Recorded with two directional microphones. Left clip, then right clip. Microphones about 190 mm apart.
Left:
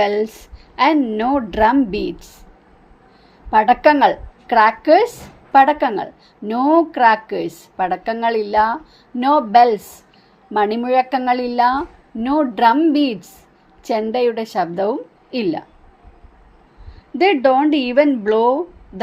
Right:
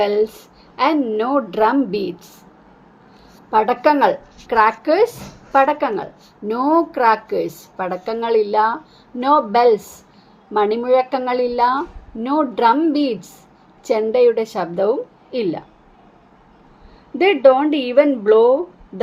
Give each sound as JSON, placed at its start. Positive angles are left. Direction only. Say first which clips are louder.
{"t": 0.8, "sound": "a woman's voice", "louder": "left 2 dB", "side_deg": 35}
{"t": 3.5, "sound": "a woman's voice", "louder": "left 3 dB", "side_deg": 35}
{"t": 17.2, "sound": "a woman's voice", "louder": "right 1 dB", "side_deg": 35}